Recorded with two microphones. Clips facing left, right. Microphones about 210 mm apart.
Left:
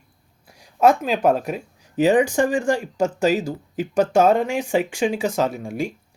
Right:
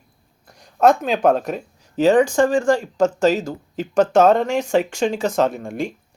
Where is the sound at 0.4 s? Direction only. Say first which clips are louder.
Right 1 dB; 10° left (ahead or behind).